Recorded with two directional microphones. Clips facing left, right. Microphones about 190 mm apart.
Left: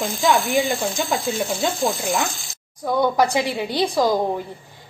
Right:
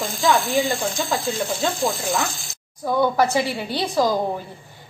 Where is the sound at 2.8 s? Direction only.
15° left (ahead or behind).